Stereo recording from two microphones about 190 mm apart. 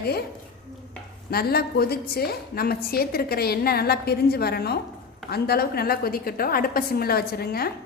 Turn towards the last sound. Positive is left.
turn(degrees=55)  # may be behind; listen again after turning